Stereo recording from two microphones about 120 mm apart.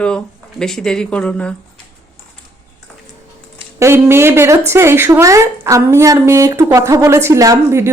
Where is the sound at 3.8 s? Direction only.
20° right (ahead or behind).